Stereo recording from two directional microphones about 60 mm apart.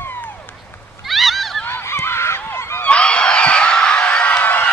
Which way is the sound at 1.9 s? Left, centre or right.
Left.